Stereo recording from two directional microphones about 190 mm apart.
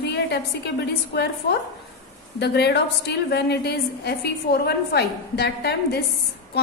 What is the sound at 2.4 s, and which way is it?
A woman's voice, 60° left (ahead or behind).